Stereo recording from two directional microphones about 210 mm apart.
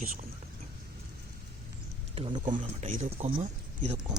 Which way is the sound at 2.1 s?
25° right (ahead or behind).